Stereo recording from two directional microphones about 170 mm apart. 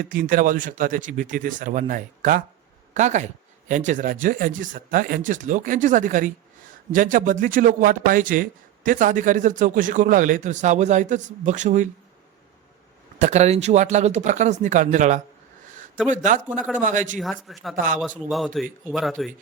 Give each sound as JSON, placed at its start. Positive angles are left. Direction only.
{"t": 0.1, "sound": "a man's voice", "side_deg": -55}
{"t": 13.1, "sound": "a man's voice", "side_deg": -45}
{"t": 16.6, "sound": "a man's voice", "side_deg": 5}
{"t": 16.8, "sound": "a man's voice", "side_deg": -50}
{"t": 17.5, "sound": "a man's voice", "side_deg": 0}
{"t": 17.7, "sound": "a man's voice", "side_deg": -55}
{"t": 18.0, "sound": "a man's voice", "side_deg": 0}